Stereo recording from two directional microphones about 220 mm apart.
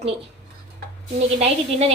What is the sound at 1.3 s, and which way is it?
Speech, 30° right (ahead or behind).